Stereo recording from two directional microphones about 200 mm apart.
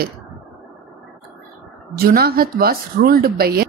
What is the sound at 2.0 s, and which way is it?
Speech, 50° right (ahead or behind).